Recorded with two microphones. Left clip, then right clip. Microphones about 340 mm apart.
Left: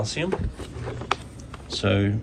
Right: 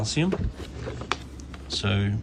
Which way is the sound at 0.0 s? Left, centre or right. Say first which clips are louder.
Even; centre.